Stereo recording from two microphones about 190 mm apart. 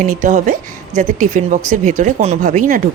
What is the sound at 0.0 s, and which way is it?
Speech, 40° right (ahead or behind).